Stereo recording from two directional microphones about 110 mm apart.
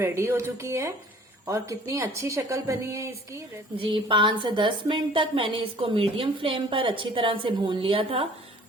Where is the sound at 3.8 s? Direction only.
50° right (ahead or behind).